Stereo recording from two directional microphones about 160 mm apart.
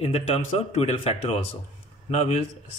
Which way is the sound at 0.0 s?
40° left (ahead or behind).